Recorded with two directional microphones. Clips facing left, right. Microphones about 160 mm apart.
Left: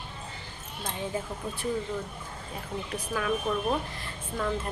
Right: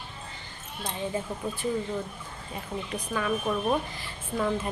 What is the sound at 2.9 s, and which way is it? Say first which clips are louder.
A woman's voice: even; centre (ahead or behind).